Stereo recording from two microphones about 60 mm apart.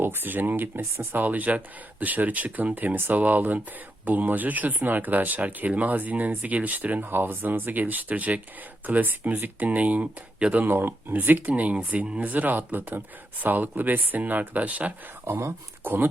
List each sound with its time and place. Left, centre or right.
0.0 s speech: right